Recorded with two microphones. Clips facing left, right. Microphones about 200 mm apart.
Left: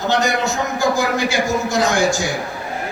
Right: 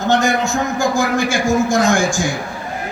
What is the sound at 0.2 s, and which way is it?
A man's voice, 50° right (ahead or behind).